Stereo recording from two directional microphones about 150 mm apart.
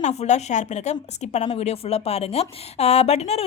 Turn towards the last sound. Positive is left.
turn(degrees=45)  # may be behind; listen again after turning